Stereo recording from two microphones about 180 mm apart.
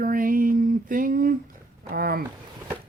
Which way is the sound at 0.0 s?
50° right (ahead or behind).